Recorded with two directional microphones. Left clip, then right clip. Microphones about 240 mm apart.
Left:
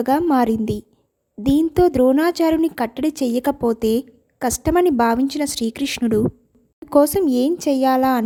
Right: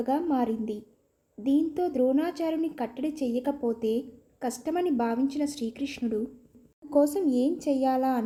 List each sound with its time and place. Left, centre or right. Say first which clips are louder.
0.0 s speech: left 10 dB; left